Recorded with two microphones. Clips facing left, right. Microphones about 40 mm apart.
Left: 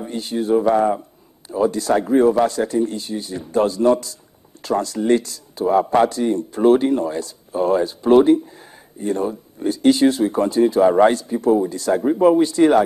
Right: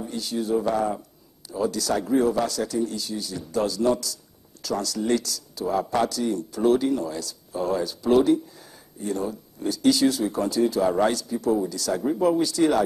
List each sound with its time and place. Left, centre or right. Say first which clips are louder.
0.0 s speech: left 5 dB; left